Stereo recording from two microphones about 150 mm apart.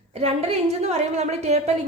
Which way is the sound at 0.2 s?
45° right (ahead or behind).